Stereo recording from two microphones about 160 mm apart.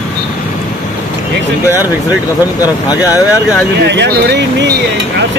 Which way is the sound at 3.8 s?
90° right.